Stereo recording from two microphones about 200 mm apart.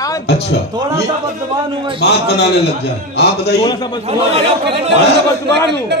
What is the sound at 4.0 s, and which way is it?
Speech, 30° right (ahead or behind).